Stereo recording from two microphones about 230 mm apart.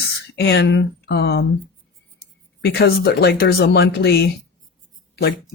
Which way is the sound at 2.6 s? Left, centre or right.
Left.